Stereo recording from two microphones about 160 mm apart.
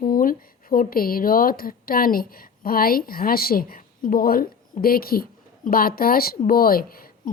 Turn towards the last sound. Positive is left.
turn(degrees=65)  # may be behind; listen again after turning